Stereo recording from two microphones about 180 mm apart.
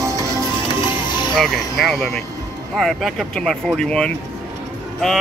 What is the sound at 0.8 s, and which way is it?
Music, 25° left (ahead or behind).